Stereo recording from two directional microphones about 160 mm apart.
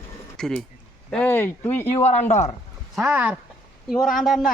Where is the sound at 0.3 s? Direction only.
5° left (ahead or behind).